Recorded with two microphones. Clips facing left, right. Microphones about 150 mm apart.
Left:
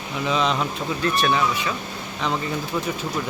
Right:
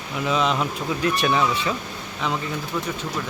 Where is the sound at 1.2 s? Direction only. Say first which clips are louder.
Left 2 dB; 20° right (ahead or behind).